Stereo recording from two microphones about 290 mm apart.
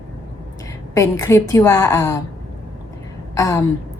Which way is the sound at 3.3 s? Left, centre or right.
Centre.